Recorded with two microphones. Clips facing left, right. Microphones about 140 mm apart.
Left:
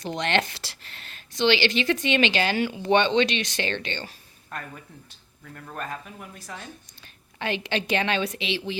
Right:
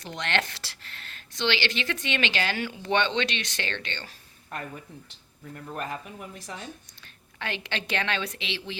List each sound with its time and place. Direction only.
0.0 s speech: 20° left (ahead or behind)
5.7 s speech: 15° right (ahead or behind)
7.3 s speech: 15° left (ahead or behind)